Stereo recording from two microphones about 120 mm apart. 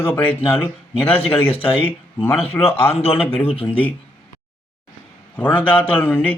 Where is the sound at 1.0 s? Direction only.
50° left (ahead or behind).